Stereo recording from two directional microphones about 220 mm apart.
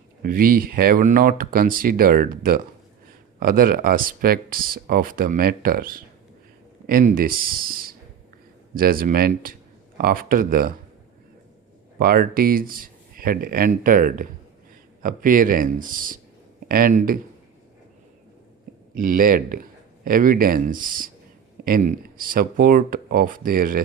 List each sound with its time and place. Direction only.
0.2 s speech: 40° right (ahead or behind)
11.9 s speech: 45° right (ahead or behind)
18.9 s speech: 40° right (ahead or behind)